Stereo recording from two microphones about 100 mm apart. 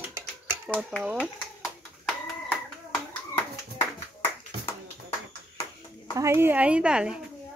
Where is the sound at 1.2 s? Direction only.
Centre (ahead or behind).